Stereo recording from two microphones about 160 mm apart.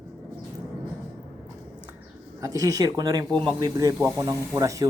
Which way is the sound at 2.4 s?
20° right (ahead or behind).